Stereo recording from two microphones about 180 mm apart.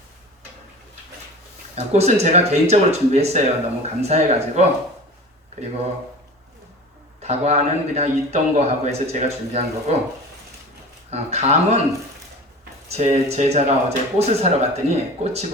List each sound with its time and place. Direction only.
1.7 s speech: 35° right (ahead or behind)
7.2 s speech: 35° right (ahead or behind)
11.1 s speech: 35° right (ahead or behind)
12.9 s speech: 35° right (ahead or behind)